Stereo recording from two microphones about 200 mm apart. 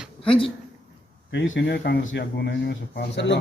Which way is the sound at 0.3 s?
25° left (ahead or behind).